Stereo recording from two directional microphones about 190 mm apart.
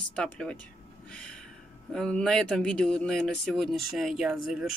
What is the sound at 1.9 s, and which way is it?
Speech, 5° left (ahead or behind).